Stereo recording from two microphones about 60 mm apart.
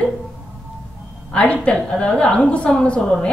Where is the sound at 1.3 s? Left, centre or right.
Left.